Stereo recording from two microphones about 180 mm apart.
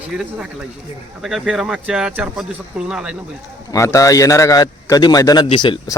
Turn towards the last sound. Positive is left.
turn(degrees=25)  # may be behind; listen again after turning